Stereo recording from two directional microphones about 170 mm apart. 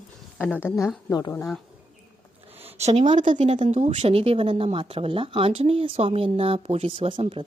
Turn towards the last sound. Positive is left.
turn(degrees=-30)  # may be behind; listen again after turning